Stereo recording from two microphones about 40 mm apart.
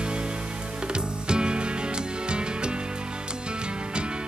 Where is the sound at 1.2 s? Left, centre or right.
Right.